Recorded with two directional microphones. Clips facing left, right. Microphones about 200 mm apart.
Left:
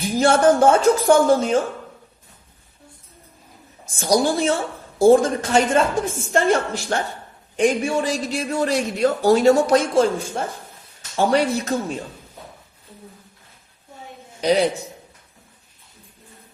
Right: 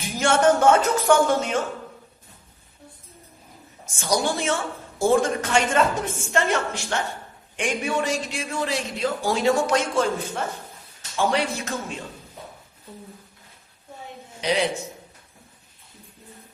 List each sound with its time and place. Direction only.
0.2 s a man's voice: 35° left (ahead or behind)
3.8 s a man's voice: 35° left (ahead or behind)
14.4 s a man's voice: 35° left (ahead or behind)